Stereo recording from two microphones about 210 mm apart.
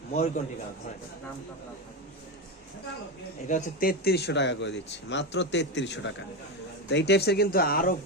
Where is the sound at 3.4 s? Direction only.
40° left (ahead or behind).